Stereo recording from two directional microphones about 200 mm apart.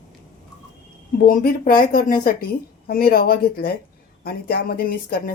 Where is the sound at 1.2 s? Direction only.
45° left (ahead or behind).